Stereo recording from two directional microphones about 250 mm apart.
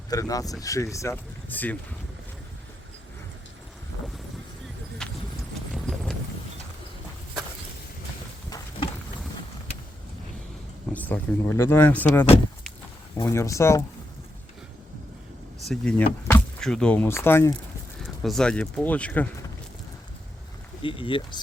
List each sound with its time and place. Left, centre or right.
0.1 s speech: centre
5.0 s clip-clop: centre
8.4 s a sound: centre
10.9 s speech: centre
15.6 s speech: centre
20.8 s speech: left